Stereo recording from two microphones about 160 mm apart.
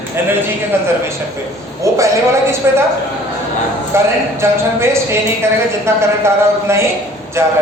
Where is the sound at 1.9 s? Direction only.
20° right (ahead or behind).